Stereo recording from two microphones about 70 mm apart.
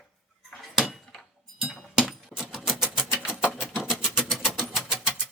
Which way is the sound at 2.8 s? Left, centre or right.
Centre.